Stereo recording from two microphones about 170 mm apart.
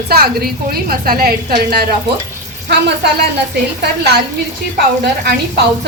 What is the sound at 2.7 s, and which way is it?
A woman's voice, 75° right (ahead or behind).